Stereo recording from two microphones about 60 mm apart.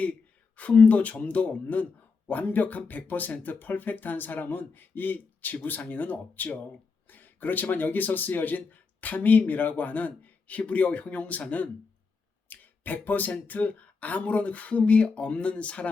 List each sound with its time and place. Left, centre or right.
0.0 s speech: left
12.5 s a sound: left
13.5 s speech: left